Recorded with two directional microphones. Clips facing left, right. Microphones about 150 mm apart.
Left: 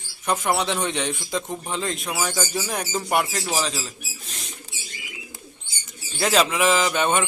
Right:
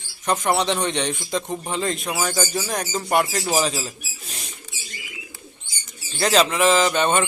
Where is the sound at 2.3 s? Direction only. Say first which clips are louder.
Right 2 dB; 10° right (ahead or behind).